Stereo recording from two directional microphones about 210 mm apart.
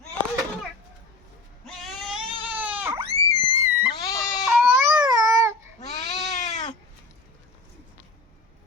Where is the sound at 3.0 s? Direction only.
30° right (ahead or behind).